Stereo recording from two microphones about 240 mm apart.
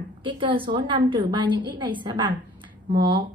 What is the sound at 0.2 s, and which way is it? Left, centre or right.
A woman's voice, right.